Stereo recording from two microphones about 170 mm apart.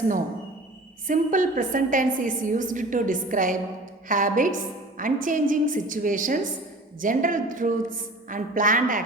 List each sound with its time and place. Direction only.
1.0 s a woman's voice: 50° right (ahead or behind)